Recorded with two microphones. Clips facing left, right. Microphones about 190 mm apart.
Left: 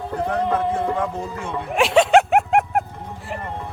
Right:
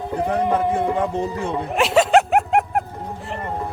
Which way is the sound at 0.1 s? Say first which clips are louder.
Right 2 dB; 15° right (ahead or behind).